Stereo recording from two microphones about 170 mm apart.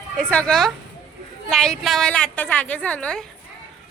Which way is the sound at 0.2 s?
5° left (ahead or behind).